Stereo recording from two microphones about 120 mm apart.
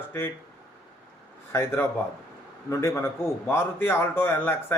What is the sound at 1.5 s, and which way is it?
A man's voice, 20° left (ahead or behind).